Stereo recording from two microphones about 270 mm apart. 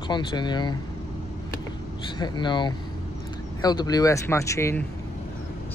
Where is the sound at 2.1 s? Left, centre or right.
Centre.